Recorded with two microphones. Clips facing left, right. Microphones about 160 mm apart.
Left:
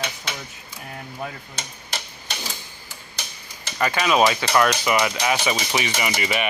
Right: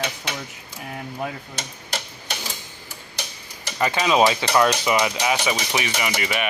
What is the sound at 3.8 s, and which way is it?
Speech, 20° right (ahead or behind).